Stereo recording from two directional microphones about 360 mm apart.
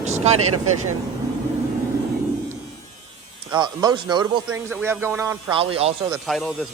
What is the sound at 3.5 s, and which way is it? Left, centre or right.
A man's voice, centre.